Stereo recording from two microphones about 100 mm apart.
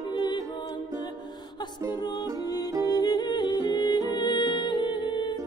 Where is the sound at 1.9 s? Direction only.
40° left (ahead or behind).